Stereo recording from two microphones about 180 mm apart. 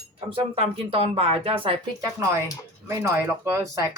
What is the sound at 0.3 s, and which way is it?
Speech, 30° right (ahead or behind).